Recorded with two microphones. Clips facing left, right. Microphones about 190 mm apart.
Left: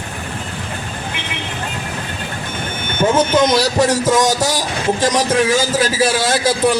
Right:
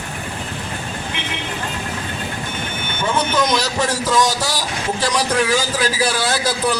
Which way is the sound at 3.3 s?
25° left (ahead or behind).